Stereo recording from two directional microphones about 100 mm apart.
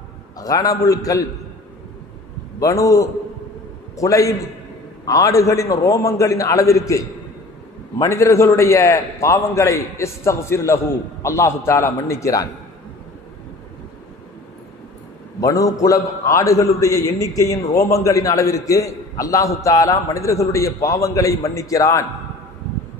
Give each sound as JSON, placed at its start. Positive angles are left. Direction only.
{"t": 0.4, "sound": "a man's voice", "side_deg": 35}
{"t": 2.6, "sound": "a man's voice", "side_deg": 35}
{"t": 8.0, "sound": "a man's voice", "side_deg": 30}
{"t": 15.4, "sound": "a man's voice", "side_deg": 35}